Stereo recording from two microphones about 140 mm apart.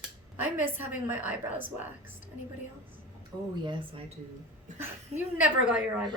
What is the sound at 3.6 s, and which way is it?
Speech, 40° right (ahead or behind).